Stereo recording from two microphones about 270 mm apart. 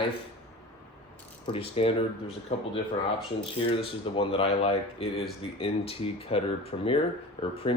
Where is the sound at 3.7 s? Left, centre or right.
Centre.